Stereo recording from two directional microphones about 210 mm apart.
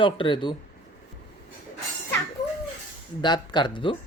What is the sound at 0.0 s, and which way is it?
Speech, 25° left (ahead or behind).